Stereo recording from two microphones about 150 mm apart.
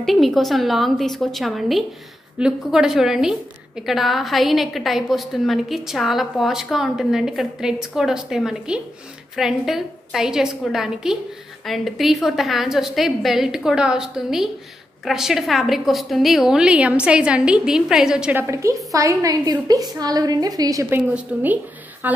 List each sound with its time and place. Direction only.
0.0 s a woman's voice: centre (ahead or behind)
18.4 s a woman's voice: 20° right (ahead or behind)
20.9 s a woman's voice: 10° right (ahead or behind)